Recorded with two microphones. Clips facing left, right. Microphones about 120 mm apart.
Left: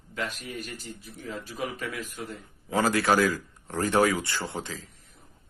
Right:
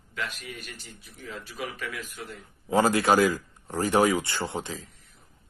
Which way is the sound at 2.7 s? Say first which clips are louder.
Right 2 dB; 25° right (ahead or behind).